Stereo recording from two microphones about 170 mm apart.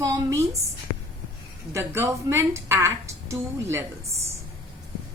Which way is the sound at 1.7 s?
15° right (ahead or behind).